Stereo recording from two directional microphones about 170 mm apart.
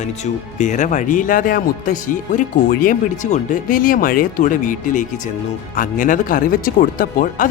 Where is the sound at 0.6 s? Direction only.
45° left (ahead or behind).